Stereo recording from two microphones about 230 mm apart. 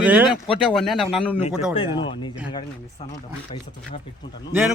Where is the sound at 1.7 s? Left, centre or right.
Left.